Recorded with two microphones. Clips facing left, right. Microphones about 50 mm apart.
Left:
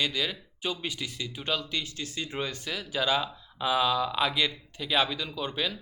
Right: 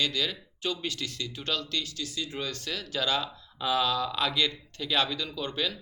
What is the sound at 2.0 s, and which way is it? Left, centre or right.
Speech, left.